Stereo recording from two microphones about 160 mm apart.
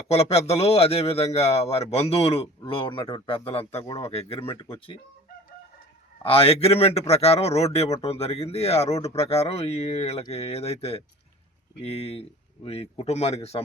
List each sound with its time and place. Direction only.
0.1 s speech: 40° left (ahead or behind)
6.2 s speech: 35° left (ahead or behind)